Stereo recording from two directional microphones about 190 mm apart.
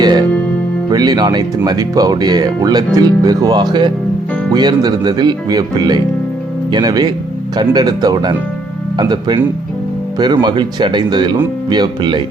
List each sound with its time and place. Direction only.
0.0 s music: 20° right (ahead or behind)
0.9 s speech: 20° right (ahead or behind)